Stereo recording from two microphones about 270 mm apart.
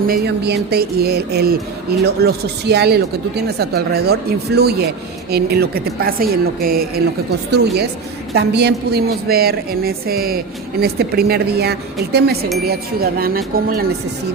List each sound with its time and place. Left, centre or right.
0.1 s a woman's voice: right